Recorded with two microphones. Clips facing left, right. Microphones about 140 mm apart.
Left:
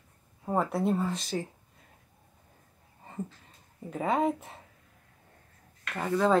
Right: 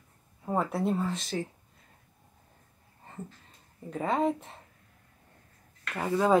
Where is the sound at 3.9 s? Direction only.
5° left (ahead or behind).